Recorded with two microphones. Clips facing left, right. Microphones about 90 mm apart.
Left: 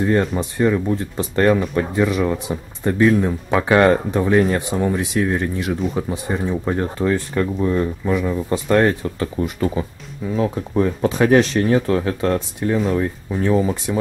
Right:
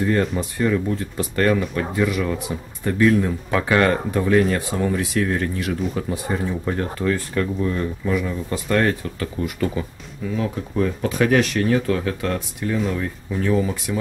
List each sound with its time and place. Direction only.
0.0 s speech: 25° left (ahead or behind)